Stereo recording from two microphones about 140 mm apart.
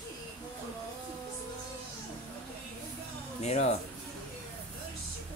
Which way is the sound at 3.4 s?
50° left (ahead or behind).